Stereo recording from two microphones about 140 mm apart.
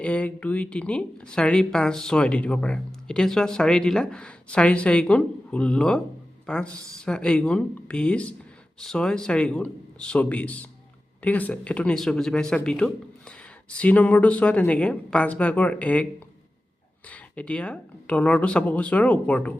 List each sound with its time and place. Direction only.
0.0 s speech: 10° left (ahead or behind)
6.4 s a sound: 5° left (ahead or behind)
7.0 s speech: 5° left (ahead or behind)
17.1 s speech: 10° left (ahead or behind)